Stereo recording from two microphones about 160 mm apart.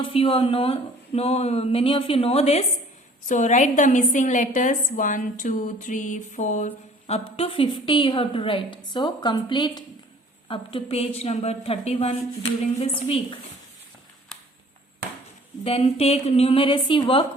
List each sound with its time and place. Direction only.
0.0 s a woman's voice: 35° left (ahead or behind)
15.6 s speech: 40° left (ahead or behind)